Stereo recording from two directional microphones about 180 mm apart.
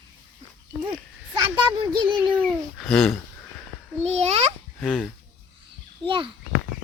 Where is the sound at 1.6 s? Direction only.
25° right (ahead or behind).